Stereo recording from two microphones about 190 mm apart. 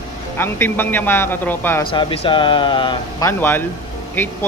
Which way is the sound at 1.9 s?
30° left (ahead or behind).